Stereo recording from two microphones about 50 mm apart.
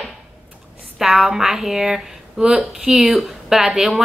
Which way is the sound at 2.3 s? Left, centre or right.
Centre.